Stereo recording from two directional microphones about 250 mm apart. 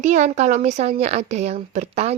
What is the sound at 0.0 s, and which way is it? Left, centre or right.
Speech, right.